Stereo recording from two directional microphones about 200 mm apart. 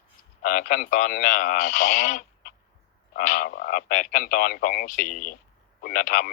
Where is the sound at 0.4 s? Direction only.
45° left (ahead or behind).